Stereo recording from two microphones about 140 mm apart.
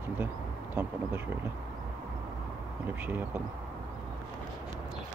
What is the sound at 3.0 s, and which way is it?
Speech, 15° right (ahead or behind).